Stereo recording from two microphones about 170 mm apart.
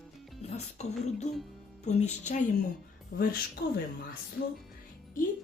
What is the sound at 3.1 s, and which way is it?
Speech, 60° left (ahead or behind).